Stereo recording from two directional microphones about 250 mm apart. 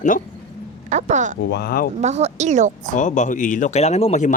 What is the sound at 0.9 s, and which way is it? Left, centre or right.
Speech, right.